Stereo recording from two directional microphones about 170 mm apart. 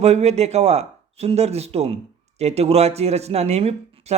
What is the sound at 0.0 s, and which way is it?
Speech, 40° right (ahead or behind).